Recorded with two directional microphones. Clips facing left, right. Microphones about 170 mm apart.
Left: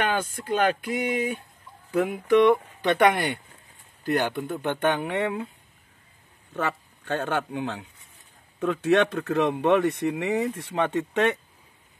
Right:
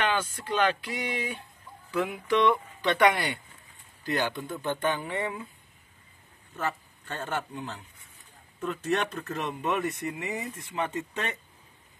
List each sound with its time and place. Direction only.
0.4 s speech: 55° left (ahead or behind); by 5.5 s 70° left (ahead or behind)
6.5 s speech: 70° left (ahead or behind)